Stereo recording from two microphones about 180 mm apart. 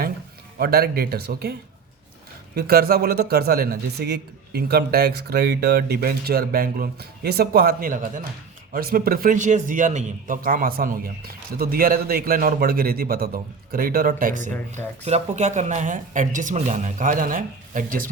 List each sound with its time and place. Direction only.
0.6 s a man's voice: 60° right (ahead or behind)
2.6 s a man's voice: 60° right (ahead or behind)